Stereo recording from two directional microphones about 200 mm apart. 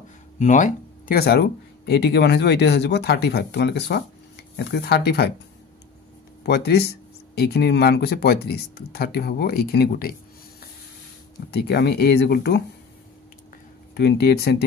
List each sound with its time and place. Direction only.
0.4 s speech: 40° left (ahead or behind); by 5.3 s 55° left (ahead or behind)
6.4 s speech: 55° left (ahead or behind)
11.5 s speech: 55° left (ahead or behind)
13.9 s speech: 55° left (ahead or behind)